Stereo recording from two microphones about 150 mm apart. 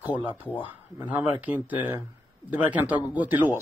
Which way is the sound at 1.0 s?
10° right (ahead or behind).